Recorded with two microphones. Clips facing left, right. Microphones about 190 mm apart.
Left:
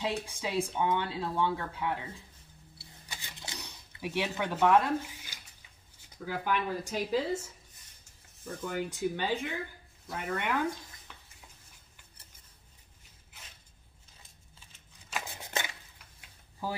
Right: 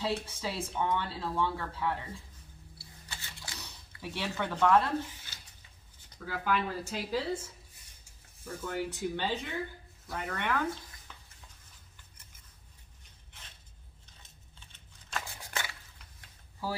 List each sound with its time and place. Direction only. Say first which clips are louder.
0.0 s speech: even; 15° left (ahead or behind)
2.8 s a sound: left 1 dB; 15° left (ahead or behind)
6.1 s speech: even; 15° left (ahead or behind)
8.6 s speech: left 2 dB; 10° left (ahead or behind)
14.7 s scissors: even; 5° left (ahead or behind)
15.2 s a sound: left 3 dB; 20° left (ahead or behind)